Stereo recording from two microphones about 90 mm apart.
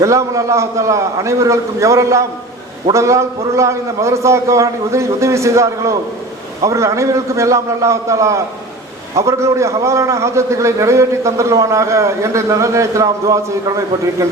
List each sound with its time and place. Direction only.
0.0 s a man's voice: 35° right (ahead or behind)